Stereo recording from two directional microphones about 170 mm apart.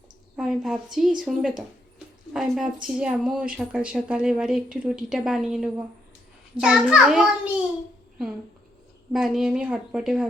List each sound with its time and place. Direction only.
0.3 s a woman's voice: 5° right (ahead or behind)
9.1 s a woman's voice: centre (ahead or behind)